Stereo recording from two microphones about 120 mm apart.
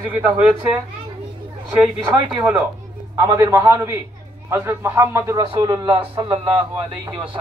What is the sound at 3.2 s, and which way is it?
A man's voice, 30° right (ahead or behind).